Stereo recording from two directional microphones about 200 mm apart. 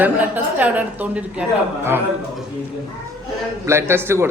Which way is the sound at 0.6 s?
10° right (ahead or behind).